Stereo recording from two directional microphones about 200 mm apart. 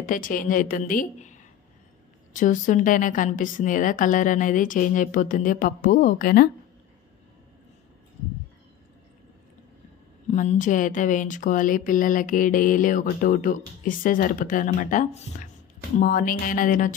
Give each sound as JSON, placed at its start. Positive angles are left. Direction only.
{"t": 0.0, "sound": "a woman's voice", "side_deg": 40}
{"t": 10.3, "sound": "a woman's voice", "side_deg": 40}